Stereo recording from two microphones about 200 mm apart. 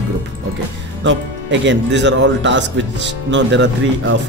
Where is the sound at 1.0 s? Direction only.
65° right (ahead or behind).